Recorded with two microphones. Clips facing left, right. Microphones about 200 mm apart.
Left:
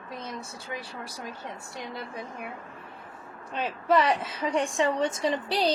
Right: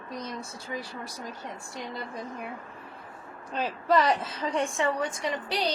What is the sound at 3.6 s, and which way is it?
Child singing, 5° left (ahead or behind).